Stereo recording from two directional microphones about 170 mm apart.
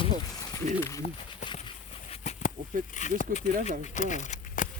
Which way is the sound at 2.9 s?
45° left (ahead or behind).